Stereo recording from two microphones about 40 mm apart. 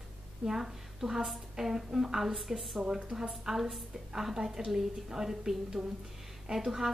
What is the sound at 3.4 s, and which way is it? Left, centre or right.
A woman's voice, centre.